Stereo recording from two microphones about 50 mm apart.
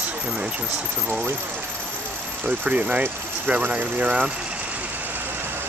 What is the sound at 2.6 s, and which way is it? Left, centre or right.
Speech, right.